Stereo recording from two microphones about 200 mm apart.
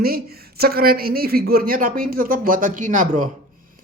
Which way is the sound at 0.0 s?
50° right (ahead or behind).